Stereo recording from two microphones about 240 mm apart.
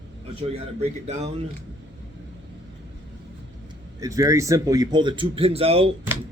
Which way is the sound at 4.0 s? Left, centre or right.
Centre.